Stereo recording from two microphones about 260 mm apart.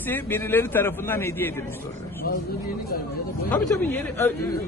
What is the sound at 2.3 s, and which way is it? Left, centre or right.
Speech, left.